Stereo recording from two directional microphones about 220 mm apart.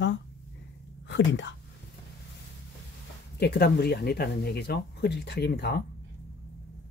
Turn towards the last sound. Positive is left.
turn(degrees=50)  # may be behind; listen again after turning